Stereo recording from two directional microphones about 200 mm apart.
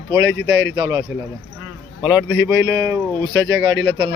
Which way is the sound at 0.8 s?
25° right (ahead or behind).